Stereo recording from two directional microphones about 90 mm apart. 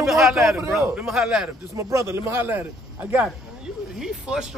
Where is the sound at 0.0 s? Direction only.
Centre (ahead or behind).